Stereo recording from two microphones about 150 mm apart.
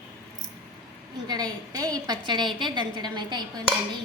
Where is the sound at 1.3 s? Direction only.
25° right (ahead or behind).